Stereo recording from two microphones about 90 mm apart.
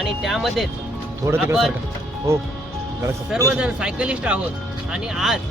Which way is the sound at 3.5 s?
10° right (ahead or behind).